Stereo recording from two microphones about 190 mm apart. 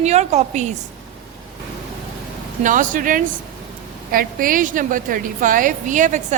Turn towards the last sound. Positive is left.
turn(degrees=-40)  # may be behind; listen again after turning